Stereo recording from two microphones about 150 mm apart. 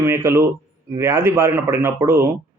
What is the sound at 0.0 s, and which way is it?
A man's voice, 15° right (ahead or behind).